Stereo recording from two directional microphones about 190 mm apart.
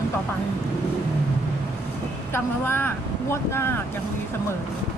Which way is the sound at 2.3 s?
10° left (ahead or behind).